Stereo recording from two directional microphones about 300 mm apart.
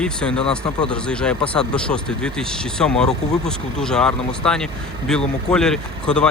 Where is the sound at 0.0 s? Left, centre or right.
Centre.